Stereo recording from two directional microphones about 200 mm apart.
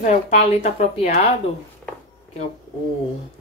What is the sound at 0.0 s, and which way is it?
Speech, 35° left (ahead or behind).